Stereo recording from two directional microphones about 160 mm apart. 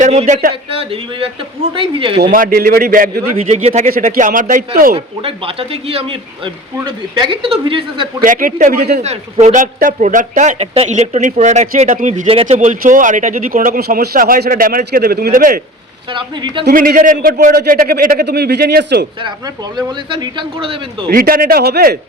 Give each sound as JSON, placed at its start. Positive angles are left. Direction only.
{"t": 0.0, "sound": "a sound", "side_deg": -45}
{"t": 0.7, "sound": "speech", "side_deg": -35}
{"t": 2.3, "sound": "speech", "side_deg": -60}
{"t": 3.3, "sound": "speech", "side_deg": -40}
{"t": 3.8, "sound": "speech", "side_deg": -65}
{"t": 4.9, "sound": "speech", "side_deg": -35}
{"t": 8.2, "sound": "speech", "side_deg": -55}
{"t": 9.0, "sound": "speech", "side_deg": -45}
{"t": 12.3, "sound": "speech", "side_deg": -40}
{"t": 16.1, "sound": "speech", "side_deg": -30}
{"t": 16.6, "sound": "a man's voice", "side_deg": -65}
{"t": 19.7, "sound": "speech", "side_deg": -30}
{"t": 21.1, "sound": "a man's voice", "side_deg": -65}